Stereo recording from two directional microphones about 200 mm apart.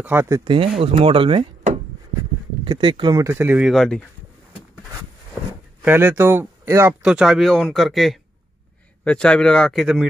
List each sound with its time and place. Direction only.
0.0 s speech: 10° right (ahead or behind)
0.7 s speech: 25° right (ahead or behind); by 4.0 s centre (ahead or behind)
5.8 s speech: 10° right (ahead or behind)